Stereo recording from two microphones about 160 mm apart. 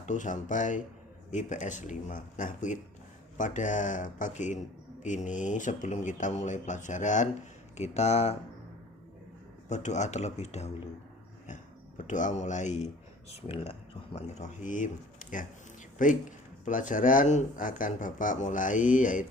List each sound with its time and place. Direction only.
0.0 s speech: 50° left (ahead or behind)
9.6 s speech: 45° left (ahead or behind)